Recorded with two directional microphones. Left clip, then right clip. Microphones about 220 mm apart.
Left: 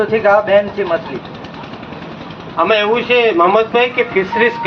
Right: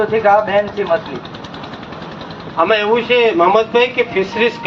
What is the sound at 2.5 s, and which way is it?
Speech, 50° left (ahead or behind).